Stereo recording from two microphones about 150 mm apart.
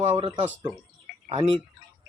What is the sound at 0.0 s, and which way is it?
Speech, 40° right (ahead or behind).